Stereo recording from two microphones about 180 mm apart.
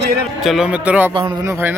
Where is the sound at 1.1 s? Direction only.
25° right (ahead or behind).